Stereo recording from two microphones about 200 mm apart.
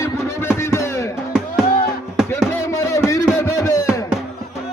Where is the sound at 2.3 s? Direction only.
15° left (ahead or behind).